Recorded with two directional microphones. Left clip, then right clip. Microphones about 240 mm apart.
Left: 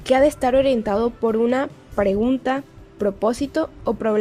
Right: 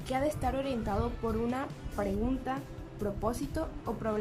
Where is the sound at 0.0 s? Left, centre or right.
Left.